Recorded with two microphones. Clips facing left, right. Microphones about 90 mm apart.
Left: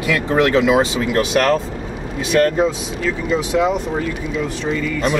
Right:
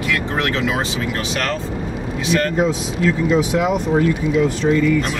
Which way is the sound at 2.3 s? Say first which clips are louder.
Left 3 dB; centre (ahead or behind).